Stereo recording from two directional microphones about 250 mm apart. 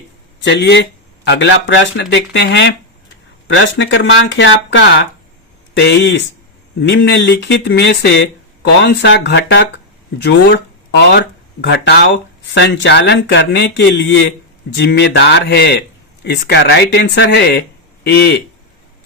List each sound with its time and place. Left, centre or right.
0.4 s speech: left